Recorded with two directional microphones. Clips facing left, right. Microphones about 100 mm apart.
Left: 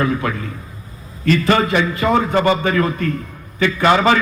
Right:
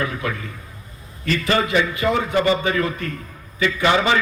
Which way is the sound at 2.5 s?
55° left (ahead or behind).